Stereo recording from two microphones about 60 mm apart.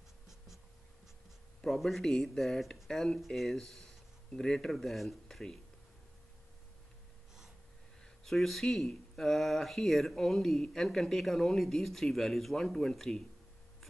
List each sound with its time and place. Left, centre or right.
1.6 s speech: centre
8.0 s speech: centre